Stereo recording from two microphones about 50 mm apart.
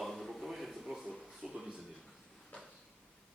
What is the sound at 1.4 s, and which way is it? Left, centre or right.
Speech, centre.